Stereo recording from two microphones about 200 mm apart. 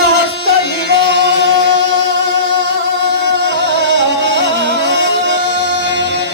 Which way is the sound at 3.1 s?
60° right (ahead or behind).